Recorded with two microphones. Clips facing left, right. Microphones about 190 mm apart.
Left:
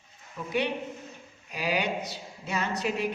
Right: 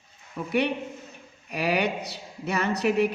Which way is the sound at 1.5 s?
65° right (ahead or behind).